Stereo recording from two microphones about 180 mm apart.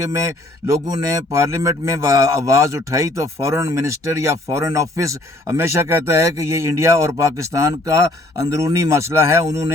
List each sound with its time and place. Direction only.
0.1 s speech: 15° right (ahead or behind)